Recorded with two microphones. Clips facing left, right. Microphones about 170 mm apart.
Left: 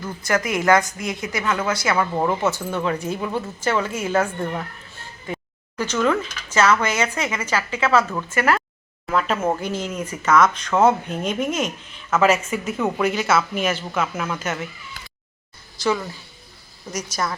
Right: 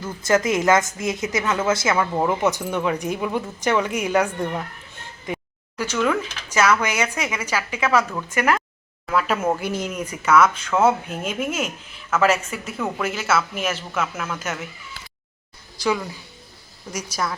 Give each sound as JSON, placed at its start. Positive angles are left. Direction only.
{"t": 0.2, "sound": "a woman's voice", "side_deg": -20}
{"t": 2.0, "sound": "speech", "side_deg": -5}
{"t": 2.4, "sound": "speech", "side_deg": -15}
{"t": 14.1, "sound": "speech", "side_deg": 10}
{"t": 16.9, "sound": "speech", "side_deg": -10}